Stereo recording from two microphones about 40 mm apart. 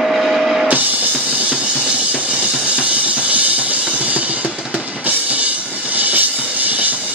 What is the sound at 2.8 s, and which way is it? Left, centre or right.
Drum kit, right.